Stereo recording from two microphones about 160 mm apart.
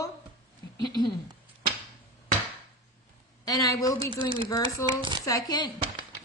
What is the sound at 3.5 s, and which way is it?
Speech, 20° left (ahead or behind).